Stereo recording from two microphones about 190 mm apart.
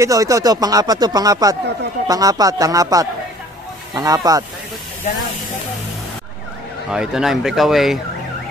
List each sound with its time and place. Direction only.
0.0 s speech: 15° right (ahead or behind)
6.9 s speech: 5° right (ahead or behind)